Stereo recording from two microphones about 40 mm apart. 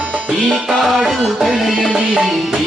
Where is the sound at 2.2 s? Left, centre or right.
Centre.